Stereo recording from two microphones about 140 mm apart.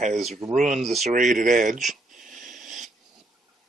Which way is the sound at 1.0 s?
65° right (ahead or behind).